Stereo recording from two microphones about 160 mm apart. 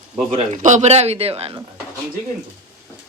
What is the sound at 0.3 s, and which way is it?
A man's voice, 50° right (ahead or behind).